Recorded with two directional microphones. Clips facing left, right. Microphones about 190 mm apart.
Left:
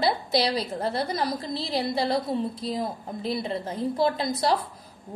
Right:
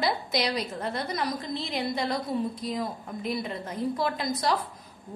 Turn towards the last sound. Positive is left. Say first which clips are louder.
# left 3 dB
turn(degrees=30)  # may be behind; listen again after turning